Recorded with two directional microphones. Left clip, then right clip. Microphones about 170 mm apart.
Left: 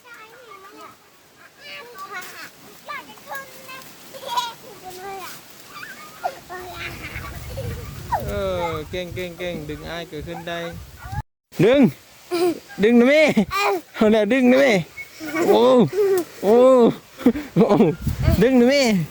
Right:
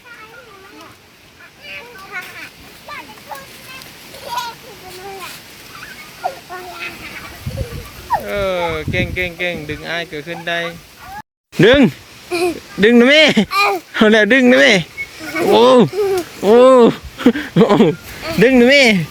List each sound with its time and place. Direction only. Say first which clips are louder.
6.2 s a sound: right 4 dB; 10° left (ahead or behind)
8.1 s speech: right 6 dB; centre (ahead or behind)
12.3 s speech: right 3 dB; 30° left (ahead or behind)
12.8 s speech: right 6 dB; 5° left (ahead or behind)
13.5 s speech: right 6 dB; 25° left (ahead or behind)
13.9 s speech: right 8 dB; 5° left (ahead or behind)